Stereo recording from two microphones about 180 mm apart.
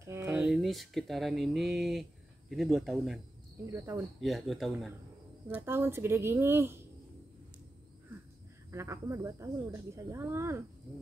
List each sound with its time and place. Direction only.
0.0 s a sound: 15° right (ahead or behind)
0.4 s speech: centre (ahead or behind)
3.7 s speech: 15° right (ahead or behind)
4.2 s speech: centre (ahead or behind)
5.5 s speech: 15° right (ahead or behind)
8.7 s speech: 15° right (ahead or behind)